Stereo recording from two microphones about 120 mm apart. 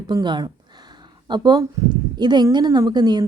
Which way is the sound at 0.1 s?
40° right (ahead or behind).